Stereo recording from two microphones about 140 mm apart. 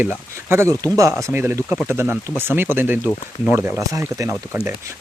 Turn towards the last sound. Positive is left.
turn(degrees=-20)  # may be behind; listen again after turning